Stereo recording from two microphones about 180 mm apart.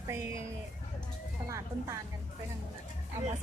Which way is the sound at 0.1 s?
15° right (ahead or behind).